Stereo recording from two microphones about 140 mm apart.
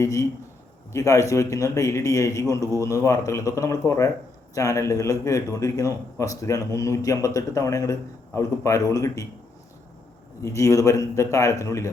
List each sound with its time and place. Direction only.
0.0 s a man's voice: 25° left (ahead or behind)
10.4 s a man's voice: 20° left (ahead or behind)